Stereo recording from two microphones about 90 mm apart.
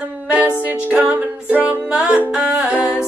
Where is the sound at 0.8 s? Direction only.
15° right (ahead or behind).